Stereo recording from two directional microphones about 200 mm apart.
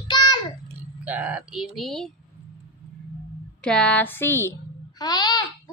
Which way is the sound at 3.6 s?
5° left (ahead or behind).